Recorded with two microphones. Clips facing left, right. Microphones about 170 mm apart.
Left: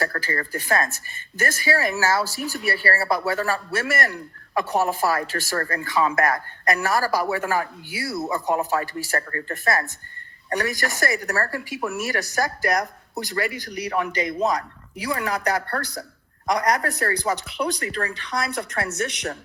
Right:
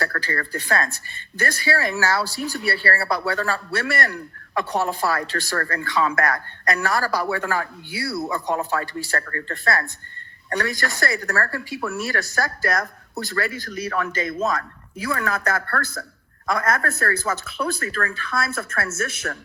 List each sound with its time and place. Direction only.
0.0 s speech: 20° left (ahead or behind)